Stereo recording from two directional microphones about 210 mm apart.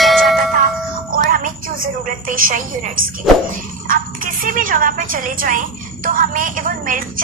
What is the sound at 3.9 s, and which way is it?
A woman's voice, 40° right (ahead or behind).